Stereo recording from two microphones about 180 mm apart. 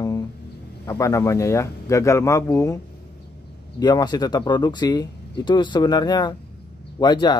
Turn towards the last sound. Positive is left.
turn(degrees=25)  # may be behind; listen again after turning